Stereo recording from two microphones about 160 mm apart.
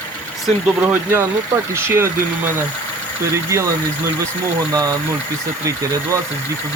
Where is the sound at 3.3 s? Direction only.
15° right (ahead or behind).